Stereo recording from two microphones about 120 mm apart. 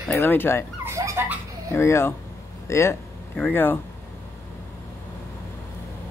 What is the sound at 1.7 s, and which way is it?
Speech, 20° left (ahead or behind).